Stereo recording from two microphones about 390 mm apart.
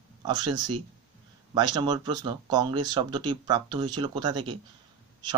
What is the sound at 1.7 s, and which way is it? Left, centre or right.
A man's voice, centre.